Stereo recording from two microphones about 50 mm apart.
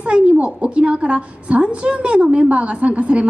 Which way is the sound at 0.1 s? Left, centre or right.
Right.